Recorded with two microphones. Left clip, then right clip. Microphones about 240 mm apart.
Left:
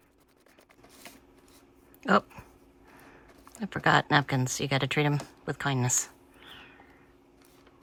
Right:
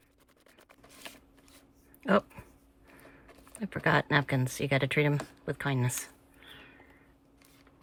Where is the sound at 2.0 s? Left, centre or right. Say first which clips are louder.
Left 2 dB; centre.